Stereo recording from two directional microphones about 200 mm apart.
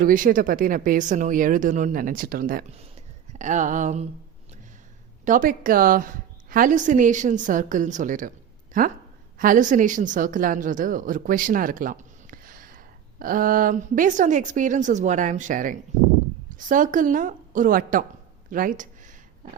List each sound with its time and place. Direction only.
0.0 s a woman's voice: 45° right (ahead or behind)
5.2 s a woman's voice: 40° right (ahead or behind)
9.4 s a woman's voice: 40° right (ahead or behind)
18.5 s a sound: 40° right (ahead or behind)